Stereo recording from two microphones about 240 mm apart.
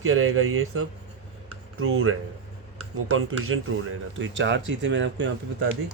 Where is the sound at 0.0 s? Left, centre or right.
Right.